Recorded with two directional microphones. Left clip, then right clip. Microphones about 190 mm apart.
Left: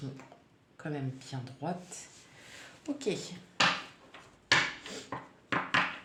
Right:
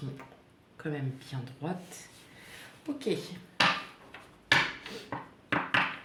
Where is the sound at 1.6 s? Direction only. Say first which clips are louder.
Left 1 dB; 25° left (ahead or behind).